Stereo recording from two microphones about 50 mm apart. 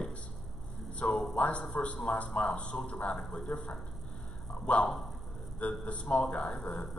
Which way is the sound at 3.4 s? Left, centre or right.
Left.